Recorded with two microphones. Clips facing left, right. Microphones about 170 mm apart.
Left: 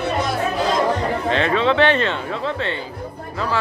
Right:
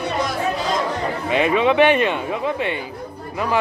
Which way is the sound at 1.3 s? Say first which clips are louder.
Right 2 dB; 15° right (ahead or behind).